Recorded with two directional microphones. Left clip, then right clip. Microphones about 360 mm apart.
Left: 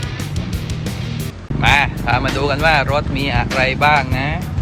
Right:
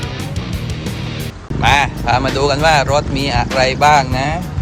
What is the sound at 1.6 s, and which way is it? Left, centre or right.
Speech, centre.